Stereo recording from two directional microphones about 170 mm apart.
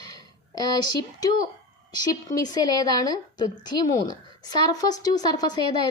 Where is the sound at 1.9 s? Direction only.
25° left (ahead or behind).